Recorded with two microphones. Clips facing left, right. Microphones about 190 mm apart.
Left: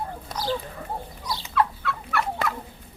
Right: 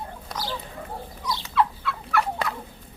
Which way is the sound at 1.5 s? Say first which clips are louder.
Even; 55° left (ahead or behind).